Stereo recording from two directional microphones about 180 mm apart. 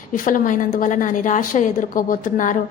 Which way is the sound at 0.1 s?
45° left (ahead or behind).